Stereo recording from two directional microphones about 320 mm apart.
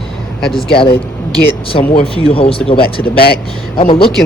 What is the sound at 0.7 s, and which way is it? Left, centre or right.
Speech, centre.